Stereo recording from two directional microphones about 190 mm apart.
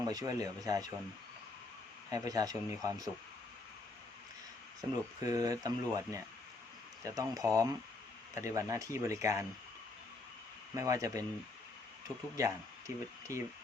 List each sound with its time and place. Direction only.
0.0 s speech: 20° right (ahead or behind)
2.0 s speech: 20° right (ahead or behind)
4.8 s speech: 20° right (ahead or behind)
10.8 s speech: 15° right (ahead or behind)